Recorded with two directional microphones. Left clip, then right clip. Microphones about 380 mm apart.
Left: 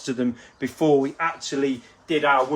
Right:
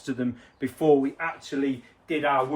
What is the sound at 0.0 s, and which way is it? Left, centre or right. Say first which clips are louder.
Speech: left 4 dB; centre.